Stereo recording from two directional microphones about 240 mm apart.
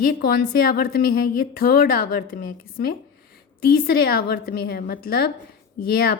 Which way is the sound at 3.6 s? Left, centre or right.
Left.